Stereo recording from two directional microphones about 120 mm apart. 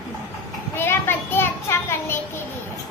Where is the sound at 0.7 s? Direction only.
20° left (ahead or behind).